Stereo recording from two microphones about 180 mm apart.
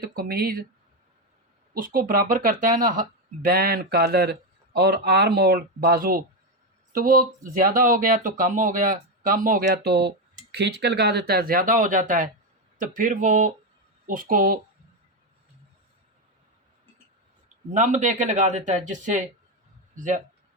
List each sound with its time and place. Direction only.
0.0 s speech: 55° right (ahead or behind)
1.7 s speech: 55° right (ahead or behind)
17.7 s speech: 45° right (ahead or behind)